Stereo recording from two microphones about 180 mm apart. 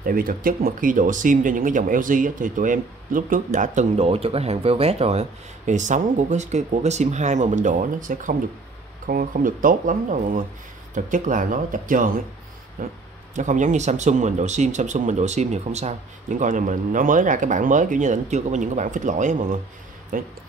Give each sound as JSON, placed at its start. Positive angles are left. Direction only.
{"t": 0.0, "sound": "speech", "side_deg": -55}